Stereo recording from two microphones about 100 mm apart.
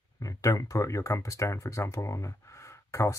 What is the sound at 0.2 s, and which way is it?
Speech, 35° left (ahead or behind).